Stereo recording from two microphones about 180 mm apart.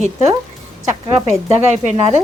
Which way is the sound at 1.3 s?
35° right (ahead or behind).